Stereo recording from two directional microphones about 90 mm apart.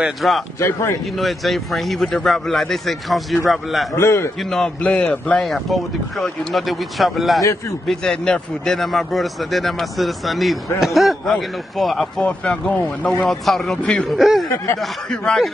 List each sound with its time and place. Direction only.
0.0 s speech: centre (ahead or behind)
0.6 s a man's voice: 30° left (ahead or behind)
1.1 s speech: centre (ahead or behind)
3.9 s a man's voice: 30° left (ahead or behind)
4.4 s a man's voice: 5° left (ahead or behind)
5.4 s speech: centre (ahead or behind)
12.3 s a man's voice: 10° left (ahead or behind)